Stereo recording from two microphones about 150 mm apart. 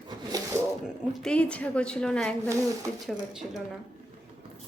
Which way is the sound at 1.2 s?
10° left (ahead or behind).